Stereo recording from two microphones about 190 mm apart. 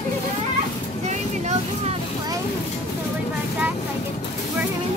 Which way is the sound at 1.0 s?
35° right (ahead or behind).